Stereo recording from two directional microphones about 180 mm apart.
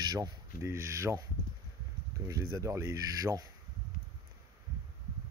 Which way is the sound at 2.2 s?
20° right (ahead or behind).